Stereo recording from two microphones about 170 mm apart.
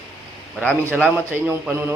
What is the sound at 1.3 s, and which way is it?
Speech, 10° right (ahead or behind).